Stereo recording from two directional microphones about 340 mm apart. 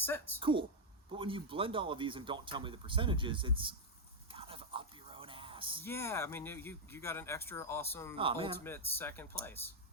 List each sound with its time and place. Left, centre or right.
0.0 s speech: centre
0.3 s speech: centre
4.3 s a sound: centre
5.8 s speech: centre
8.1 s speech: centre
8.5 s speech: centre